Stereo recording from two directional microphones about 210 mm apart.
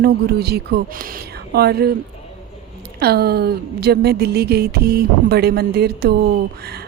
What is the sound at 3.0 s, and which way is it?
Speech, 50° right (ahead or behind).